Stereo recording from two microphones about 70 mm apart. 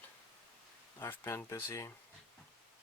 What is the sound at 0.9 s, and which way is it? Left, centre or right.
Speech, left.